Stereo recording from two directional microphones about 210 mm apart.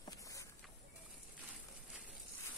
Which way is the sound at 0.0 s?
15° left (ahead or behind).